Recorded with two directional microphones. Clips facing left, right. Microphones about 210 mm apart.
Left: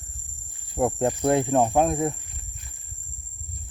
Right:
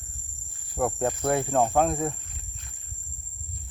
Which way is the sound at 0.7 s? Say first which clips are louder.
Left 3 dB; 15° left (ahead or behind).